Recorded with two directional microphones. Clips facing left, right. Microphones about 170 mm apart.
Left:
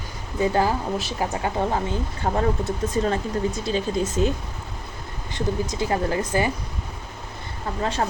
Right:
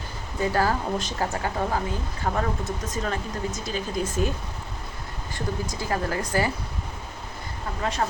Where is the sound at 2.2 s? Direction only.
30° left (ahead or behind).